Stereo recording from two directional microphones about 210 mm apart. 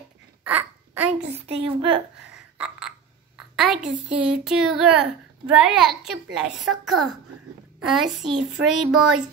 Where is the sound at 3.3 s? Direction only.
Centre (ahead or behind).